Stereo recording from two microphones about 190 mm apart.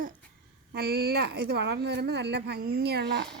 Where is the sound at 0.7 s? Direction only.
55° right (ahead or behind).